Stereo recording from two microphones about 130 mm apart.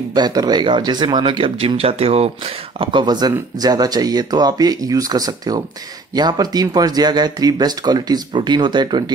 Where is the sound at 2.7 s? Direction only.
35° right (ahead or behind).